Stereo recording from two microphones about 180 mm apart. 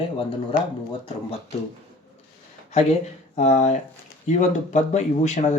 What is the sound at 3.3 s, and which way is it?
Speech, 40° left (ahead or behind).